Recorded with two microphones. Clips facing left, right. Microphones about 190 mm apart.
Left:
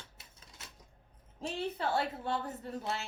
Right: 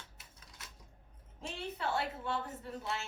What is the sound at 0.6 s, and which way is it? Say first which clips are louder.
Coin: left 1 dB; 25° left (ahead or behind).